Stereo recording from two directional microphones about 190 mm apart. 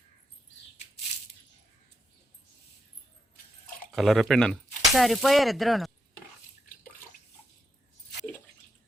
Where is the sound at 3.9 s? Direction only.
Centre (ahead or behind).